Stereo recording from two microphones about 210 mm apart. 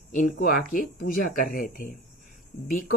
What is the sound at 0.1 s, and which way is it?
Speech, 40° left (ahead or behind).